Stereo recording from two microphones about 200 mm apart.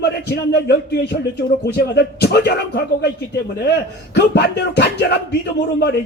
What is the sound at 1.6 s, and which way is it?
A man's voice, 55° left (ahead or behind).